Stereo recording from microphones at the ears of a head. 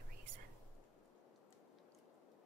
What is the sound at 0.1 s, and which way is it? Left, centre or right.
Whispering, right.